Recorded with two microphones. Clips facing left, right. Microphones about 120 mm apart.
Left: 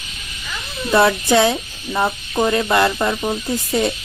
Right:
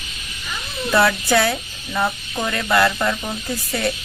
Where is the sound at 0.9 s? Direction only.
25° left (ahead or behind).